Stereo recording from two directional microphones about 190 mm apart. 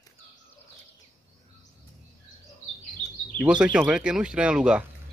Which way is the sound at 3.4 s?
5° right (ahead or behind).